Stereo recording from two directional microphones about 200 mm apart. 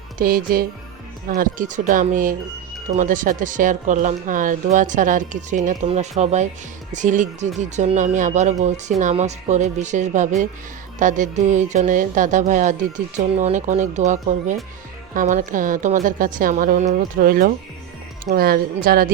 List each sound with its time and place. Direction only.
0.2 s speech: 45° right (ahead or behind)